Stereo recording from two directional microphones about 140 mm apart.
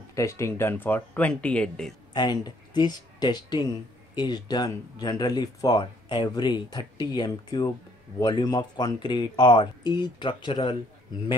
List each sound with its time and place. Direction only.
0.1 s speech: 20° left (ahead or behind); by 2.0 s 5° left (ahead or behind)
2.1 s speech: 30° left (ahead or behind)